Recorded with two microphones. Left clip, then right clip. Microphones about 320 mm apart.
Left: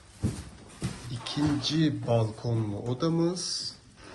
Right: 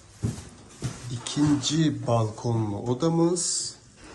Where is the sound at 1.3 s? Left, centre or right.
Centre.